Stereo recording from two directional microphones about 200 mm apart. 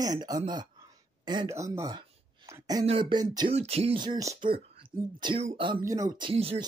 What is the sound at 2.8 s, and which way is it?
Speech, 25° right (ahead or behind).